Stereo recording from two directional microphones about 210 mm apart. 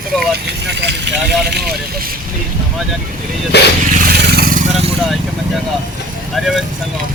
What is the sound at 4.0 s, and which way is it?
Vehicle, 50° right (ahead or behind).